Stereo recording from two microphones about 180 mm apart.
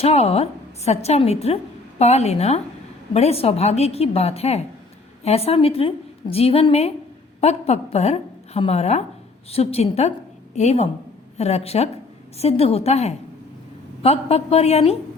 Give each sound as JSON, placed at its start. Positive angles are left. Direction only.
{"t": 0.0, "sound": "a woman's voice", "side_deg": 35}